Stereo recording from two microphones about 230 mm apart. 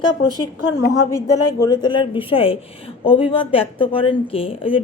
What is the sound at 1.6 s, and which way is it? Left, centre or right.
A woman's voice, centre.